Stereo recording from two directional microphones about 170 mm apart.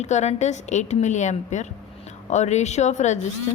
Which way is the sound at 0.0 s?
40° left (ahead or behind).